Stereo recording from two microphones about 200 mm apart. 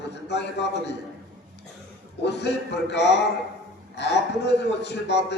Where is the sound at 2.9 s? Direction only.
60° left (ahead or behind).